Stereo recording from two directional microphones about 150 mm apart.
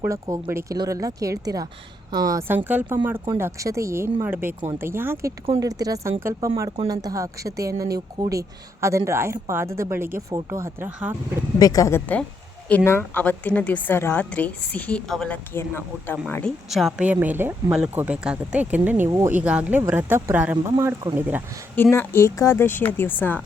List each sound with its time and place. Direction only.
0.0 s speech: 20° right (ahead or behind)
2.6 s speech: 10° right (ahead or behind)
11.6 s a woman's voice: 25° left (ahead or behind); by 15.4 s 5° left (ahead or behind)
16.6 s speech: centre (ahead or behind)
21.8 s a woman's voice: 15° left (ahead or behind)